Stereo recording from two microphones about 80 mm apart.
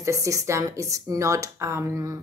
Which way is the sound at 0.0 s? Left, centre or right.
Right.